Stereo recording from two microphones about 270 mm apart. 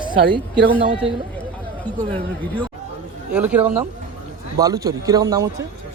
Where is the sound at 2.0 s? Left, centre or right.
Right.